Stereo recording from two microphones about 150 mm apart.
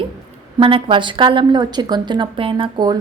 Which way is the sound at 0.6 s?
35° right (ahead or behind).